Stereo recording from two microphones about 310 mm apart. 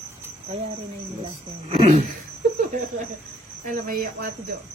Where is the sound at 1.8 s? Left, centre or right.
Right.